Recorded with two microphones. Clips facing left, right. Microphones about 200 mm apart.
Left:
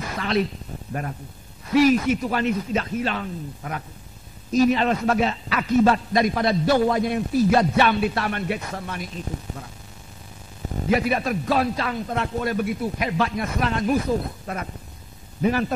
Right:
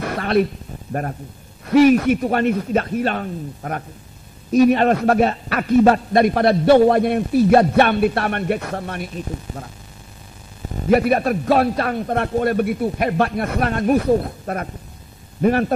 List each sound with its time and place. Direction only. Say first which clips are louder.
0.0 s a sound: right 5 dB; 60° right (ahead or behind)
1.7 s a man's voice: right 5 dB; 60° right (ahead or behind)
10.9 s a man's voice: right 6 dB; 55° right (ahead or behind)